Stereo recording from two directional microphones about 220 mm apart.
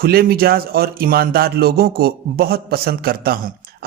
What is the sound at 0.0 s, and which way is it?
Speech, 45° right (ahead or behind).